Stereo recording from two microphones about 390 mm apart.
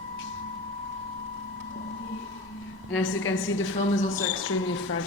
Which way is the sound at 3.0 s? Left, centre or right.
Left.